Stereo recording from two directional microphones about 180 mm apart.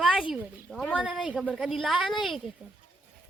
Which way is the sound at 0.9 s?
5° right (ahead or behind).